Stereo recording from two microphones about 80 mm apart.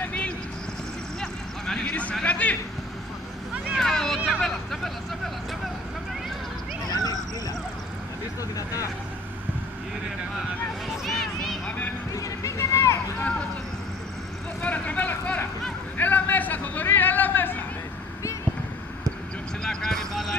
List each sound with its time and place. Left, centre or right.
0.0 s vehicle: centre
1.2 s a sound: centre
2.2 s speech: centre
3.7 s vehicle: centre
6.9 s dog: left
10.9 s a sound: centre
12.2 s run: left
14.6 s a sound: centre
19.6 s vehicle: centre